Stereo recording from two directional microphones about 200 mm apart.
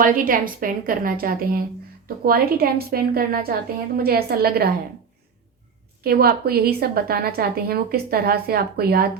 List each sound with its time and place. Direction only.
0.0 s a woman's voice: 45° right (ahead or behind)
6.0 s a woman's voice: 50° right (ahead or behind)